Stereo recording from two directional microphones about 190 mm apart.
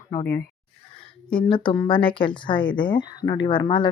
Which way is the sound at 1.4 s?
25° left (ahead or behind).